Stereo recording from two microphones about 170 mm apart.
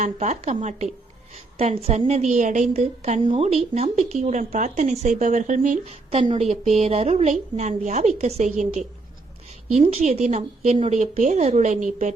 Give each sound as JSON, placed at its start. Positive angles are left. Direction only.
{"t": 0.0, "sound": "a woman's voice", "side_deg": -45}